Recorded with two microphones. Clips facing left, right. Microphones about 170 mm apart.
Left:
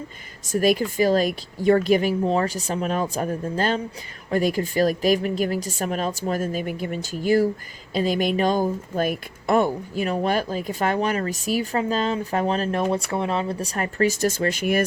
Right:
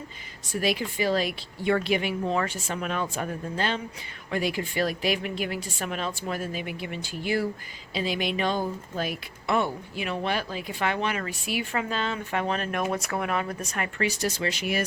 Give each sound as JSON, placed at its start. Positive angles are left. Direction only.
{"t": 0.4, "sound": "speech", "side_deg": 45}